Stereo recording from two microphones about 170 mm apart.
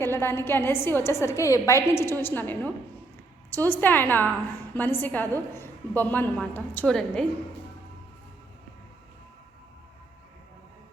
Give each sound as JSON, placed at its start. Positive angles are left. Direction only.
{"t": 0.0, "sound": "a woman's voice", "side_deg": 15}